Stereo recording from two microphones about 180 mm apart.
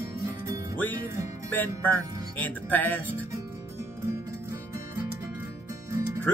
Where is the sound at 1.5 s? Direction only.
10° left (ahead or behind).